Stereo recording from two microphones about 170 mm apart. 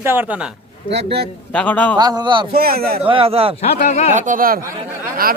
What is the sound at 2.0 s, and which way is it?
Speech, 25° right (ahead or behind).